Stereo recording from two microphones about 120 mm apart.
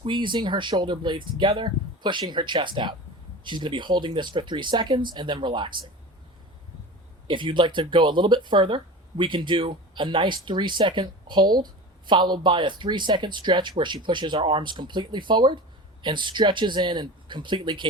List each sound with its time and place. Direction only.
0.0 s speech: 40° right (ahead or behind)
7.3 s speech: 40° right (ahead or behind)